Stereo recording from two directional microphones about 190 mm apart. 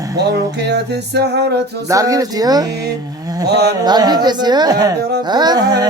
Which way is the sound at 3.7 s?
20° right (ahead or behind).